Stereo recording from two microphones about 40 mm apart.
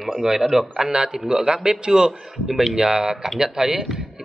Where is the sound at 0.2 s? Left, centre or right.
Centre.